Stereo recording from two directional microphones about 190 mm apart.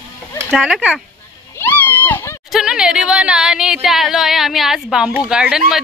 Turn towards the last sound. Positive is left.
turn(degrees=-5)  # may be behind; listen again after turning